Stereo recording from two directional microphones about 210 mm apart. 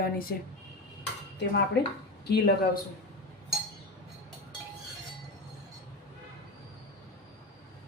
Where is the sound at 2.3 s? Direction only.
45° left (ahead or behind).